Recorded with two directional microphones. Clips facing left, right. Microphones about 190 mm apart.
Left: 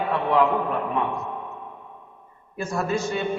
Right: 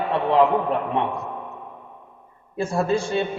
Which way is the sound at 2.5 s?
30° right (ahead or behind).